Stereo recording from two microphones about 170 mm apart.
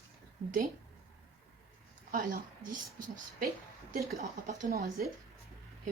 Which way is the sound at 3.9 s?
65° right (ahead or behind).